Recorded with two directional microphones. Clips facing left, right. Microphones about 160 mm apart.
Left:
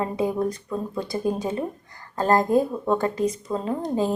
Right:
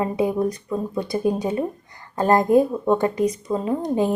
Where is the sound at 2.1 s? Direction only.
20° right (ahead or behind).